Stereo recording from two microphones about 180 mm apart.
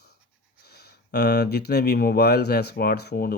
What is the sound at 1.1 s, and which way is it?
Speech, 65° left (ahead or behind).